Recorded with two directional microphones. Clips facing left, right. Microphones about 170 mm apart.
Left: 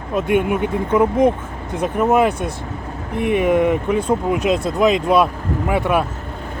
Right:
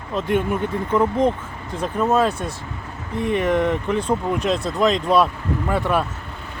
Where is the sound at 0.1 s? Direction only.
10° left (ahead or behind).